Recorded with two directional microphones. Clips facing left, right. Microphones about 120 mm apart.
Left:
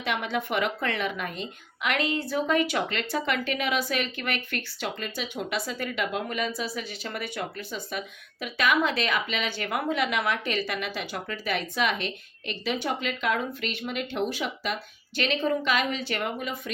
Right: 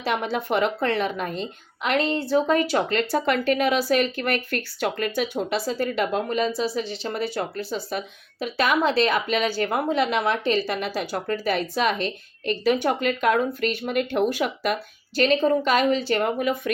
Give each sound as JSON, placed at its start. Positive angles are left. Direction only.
{"t": 0.0, "sound": "a woman's voice", "side_deg": -35}
{"t": 5.4, "sound": "a woman's voice", "side_deg": -35}
{"t": 16.4, "sound": "speech", "side_deg": -60}